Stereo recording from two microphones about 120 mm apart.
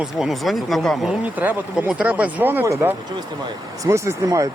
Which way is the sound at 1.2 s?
15° right (ahead or behind).